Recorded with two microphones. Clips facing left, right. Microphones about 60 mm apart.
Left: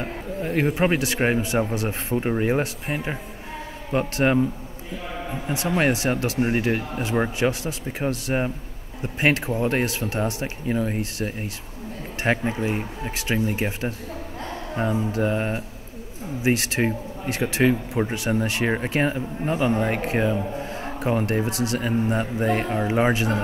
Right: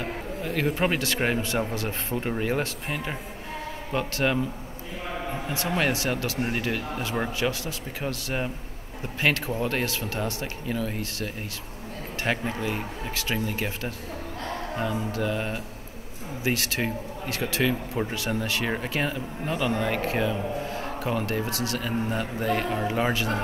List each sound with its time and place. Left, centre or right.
0.0 s a sound: left
0.7 s speech: centre
3.9 s speech: left
5.8 s speech: left
14.4 s music: left
15.0 s a sound: left
16.4 s a man's voice: left